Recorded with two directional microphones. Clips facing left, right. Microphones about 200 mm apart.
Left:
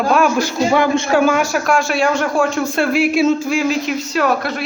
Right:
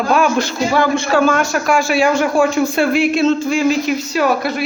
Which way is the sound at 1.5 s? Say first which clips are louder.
Right 1 dB; centre (ahead or behind).